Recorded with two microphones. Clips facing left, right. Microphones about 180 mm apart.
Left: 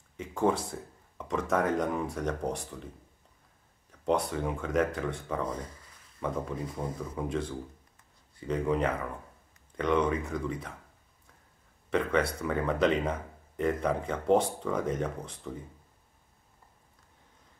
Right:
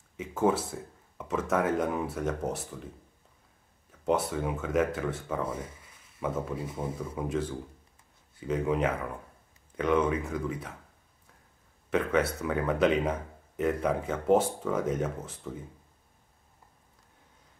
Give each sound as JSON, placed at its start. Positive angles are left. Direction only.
{"t": 0.2, "sound": "speech", "side_deg": -5}
{"t": 4.0, "sound": "speech", "side_deg": -5}
{"t": 5.8, "sound": "a sound", "side_deg": -5}
{"t": 6.7, "sound": "speech", "side_deg": -25}
{"t": 7.0, "sound": "speech", "side_deg": -10}
{"t": 11.9, "sound": "speech", "side_deg": -5}